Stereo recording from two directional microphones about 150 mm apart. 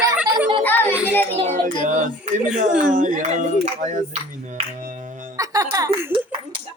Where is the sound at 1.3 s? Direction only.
40° right (ahead or behind).